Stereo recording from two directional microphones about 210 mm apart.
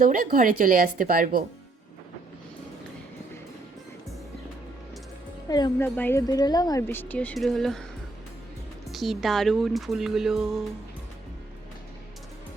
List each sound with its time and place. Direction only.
0.0 s speech: 40° right (ahead or behind)
5.5 s a woman's voice: 20° left (ahead or behind); by 7.9 s centre (ahead or behind)
8.9 s speech: centre (ahead or behind)